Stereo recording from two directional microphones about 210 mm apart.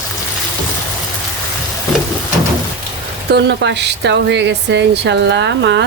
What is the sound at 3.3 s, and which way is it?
Speech, 55° right (ahead or behind).